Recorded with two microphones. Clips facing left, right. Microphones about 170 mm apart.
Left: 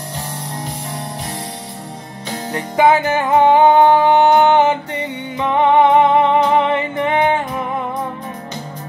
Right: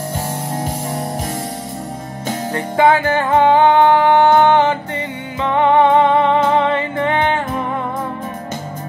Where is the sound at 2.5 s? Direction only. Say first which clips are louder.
Even; 20° left (ahead or behind).